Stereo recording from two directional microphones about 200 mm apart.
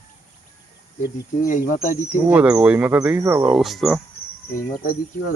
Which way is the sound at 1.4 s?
40° left (ahead or behind).